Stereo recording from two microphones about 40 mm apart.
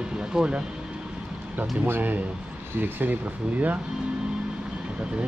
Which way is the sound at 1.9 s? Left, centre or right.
Right.